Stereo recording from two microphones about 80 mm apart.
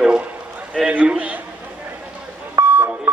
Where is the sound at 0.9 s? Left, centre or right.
Centre.